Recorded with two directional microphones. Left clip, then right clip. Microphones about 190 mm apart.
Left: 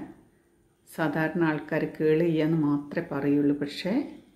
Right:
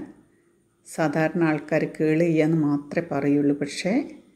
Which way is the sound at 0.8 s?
20° right (ahead or behind).